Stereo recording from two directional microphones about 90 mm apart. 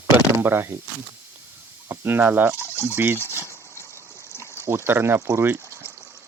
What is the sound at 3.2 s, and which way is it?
Water, 30° left (ahead or behind).